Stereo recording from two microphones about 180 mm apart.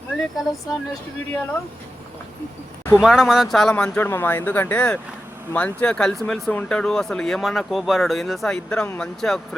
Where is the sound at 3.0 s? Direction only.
5° right (ahead or behind).